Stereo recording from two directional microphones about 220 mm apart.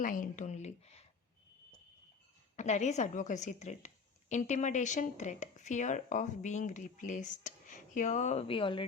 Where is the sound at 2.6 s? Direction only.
30° left (ahead or behind).